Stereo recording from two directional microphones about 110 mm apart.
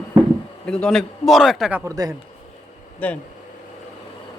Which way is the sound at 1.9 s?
35° right (ahead or behind).